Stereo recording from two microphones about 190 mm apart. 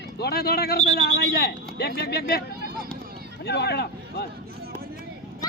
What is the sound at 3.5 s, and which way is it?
Speech, 60° left (ahead or behind).